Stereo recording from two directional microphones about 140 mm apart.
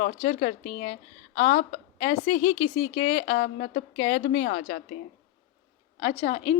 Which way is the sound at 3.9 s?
45° left (ahead or behind).